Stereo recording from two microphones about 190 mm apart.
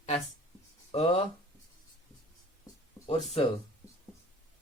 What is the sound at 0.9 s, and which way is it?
Speech, 30° left (ahead or behind).